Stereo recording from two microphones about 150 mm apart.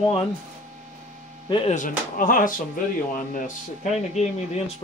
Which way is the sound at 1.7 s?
60° left (ahead or behind).